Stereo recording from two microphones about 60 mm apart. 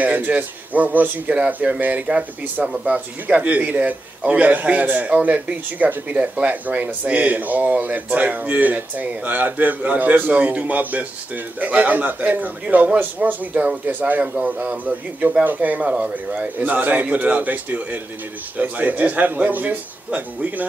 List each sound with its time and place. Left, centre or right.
0.0 s speech: right